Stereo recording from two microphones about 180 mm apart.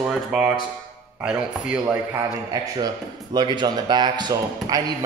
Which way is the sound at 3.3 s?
25° right (ahead or behind).